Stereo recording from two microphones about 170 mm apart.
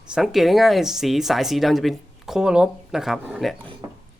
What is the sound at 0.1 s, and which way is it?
Speech, centre (ahead or behind).